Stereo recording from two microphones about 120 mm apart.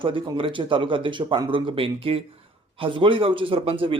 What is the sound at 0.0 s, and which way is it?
Speech, 45° right (ahead or behind).